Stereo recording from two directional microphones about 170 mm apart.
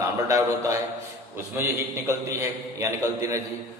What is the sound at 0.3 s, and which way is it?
A man's voice, 20° right (ahead or behind).